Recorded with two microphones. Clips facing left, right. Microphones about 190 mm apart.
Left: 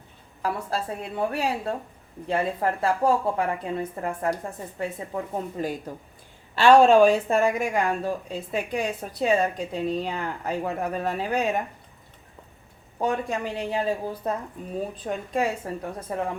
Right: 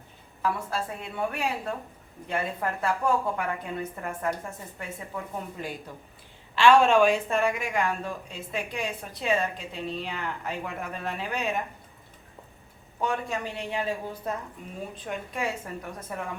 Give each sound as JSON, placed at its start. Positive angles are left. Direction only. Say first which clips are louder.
{"t": 0.4, "sound": "speech", "louder": "left 1 dB", "side_deg": 35}
{"t": 13.6, "sound": "speech", "louder": "left 6 dB", "side_deg": 35}